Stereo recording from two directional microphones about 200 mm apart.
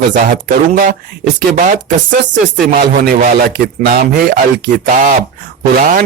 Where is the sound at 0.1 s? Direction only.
40° right (ahead or behind).